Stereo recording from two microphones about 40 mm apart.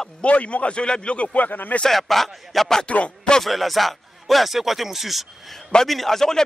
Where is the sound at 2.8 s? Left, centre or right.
Left.